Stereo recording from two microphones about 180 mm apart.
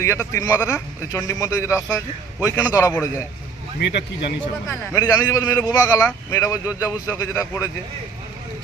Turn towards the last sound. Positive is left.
turn(degrees=15)  # may be behind; listen again after turning